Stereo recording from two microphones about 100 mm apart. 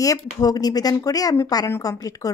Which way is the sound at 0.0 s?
35° left (ahead or behind).